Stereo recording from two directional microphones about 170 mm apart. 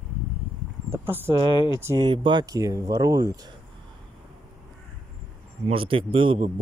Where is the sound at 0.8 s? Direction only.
15° right (ahead or behind).